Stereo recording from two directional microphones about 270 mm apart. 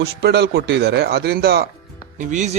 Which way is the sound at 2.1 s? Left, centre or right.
Right.